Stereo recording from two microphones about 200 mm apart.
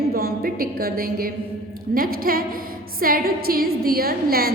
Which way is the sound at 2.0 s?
45° right (ahead or behind).